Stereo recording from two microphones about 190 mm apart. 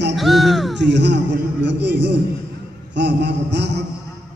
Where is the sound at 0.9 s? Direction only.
65° right (ahead or behind).